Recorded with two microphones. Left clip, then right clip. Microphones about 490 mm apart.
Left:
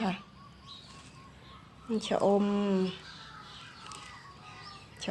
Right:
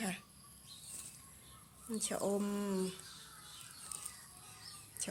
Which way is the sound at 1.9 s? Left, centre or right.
Right.